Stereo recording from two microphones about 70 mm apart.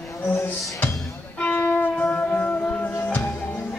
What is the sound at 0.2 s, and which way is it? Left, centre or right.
Music, left.